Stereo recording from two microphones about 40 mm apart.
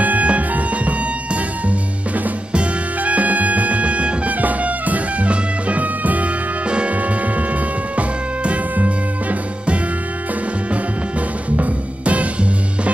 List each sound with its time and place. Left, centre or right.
0.0 s music: right
3.0 s music: right
8.5 s music: right
11.5 s music: right